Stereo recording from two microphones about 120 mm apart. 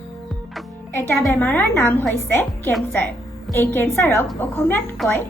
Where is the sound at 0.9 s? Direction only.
20° left (ahead or behind).